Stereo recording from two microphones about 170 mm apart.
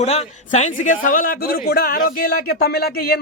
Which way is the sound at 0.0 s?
40° left (ahead or behind).